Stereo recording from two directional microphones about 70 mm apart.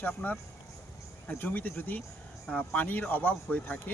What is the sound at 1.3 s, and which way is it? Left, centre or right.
Speech, left.